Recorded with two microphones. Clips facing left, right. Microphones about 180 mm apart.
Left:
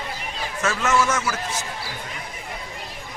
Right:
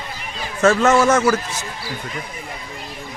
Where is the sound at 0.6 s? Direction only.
55° right (ahead or behind).